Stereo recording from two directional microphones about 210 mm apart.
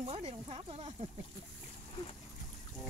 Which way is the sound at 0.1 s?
30° right (ahead or behind).